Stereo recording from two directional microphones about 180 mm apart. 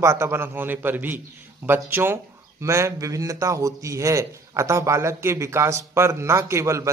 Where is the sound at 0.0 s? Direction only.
15° right (ahead or behind).